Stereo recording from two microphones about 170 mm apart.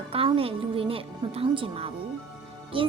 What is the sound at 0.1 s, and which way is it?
A woman's voice, 35° right (ahead or behind).